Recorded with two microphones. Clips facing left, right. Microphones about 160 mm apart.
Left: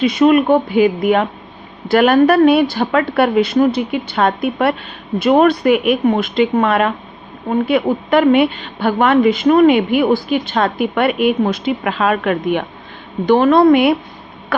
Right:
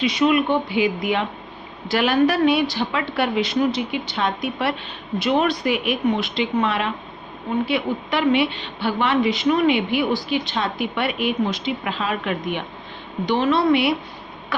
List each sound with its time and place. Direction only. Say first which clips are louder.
0.0 s a woman's voice: left 7 dB; 50° left (ahead or behind)